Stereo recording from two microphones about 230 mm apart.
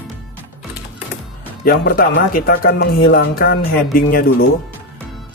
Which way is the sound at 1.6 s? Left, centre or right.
Left.